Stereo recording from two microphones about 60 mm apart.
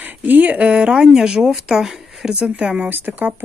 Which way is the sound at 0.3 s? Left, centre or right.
Right.